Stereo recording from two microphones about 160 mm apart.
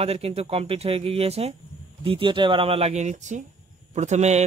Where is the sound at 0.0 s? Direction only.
40° right (ahead or behind).